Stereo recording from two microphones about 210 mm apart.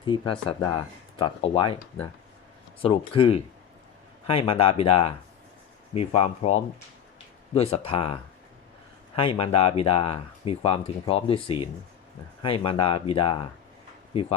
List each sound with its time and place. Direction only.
0.0 s speech: 25° left (ahead or behind)